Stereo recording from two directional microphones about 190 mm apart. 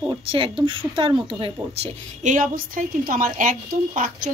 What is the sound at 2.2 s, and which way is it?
A woman's voice, 45° right (ahead or behind).